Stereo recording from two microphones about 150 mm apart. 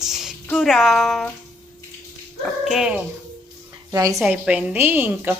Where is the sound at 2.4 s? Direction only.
Centre (ahead or behind).